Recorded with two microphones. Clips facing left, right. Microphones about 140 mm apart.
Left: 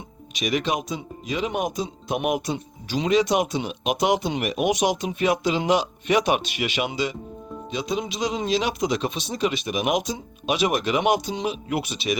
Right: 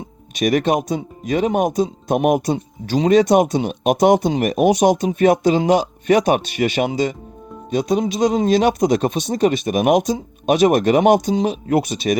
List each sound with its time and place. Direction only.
0.3 s speech: 50° right (ahead or behind)